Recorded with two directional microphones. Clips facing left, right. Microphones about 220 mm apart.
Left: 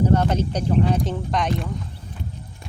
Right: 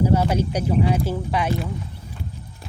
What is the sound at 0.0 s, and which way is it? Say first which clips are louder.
Speech: even; 10° right (ahead or behind).